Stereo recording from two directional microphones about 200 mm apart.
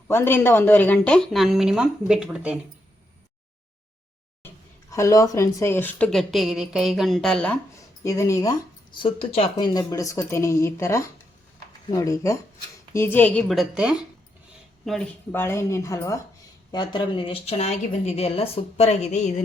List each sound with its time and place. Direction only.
0.1 s a woman's voice: 10° left (ahead or behind); by 2.6 s 5° right (ahead or behind)
4.9 s a woman's voice: 15° left (ahead or behind)
8.0 s a woman's voice: 15° left (ahead or behind); by 19.3 s 35° left (ahead or behind)